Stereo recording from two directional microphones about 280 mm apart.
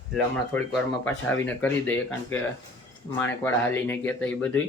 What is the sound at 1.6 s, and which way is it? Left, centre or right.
Speech, centre.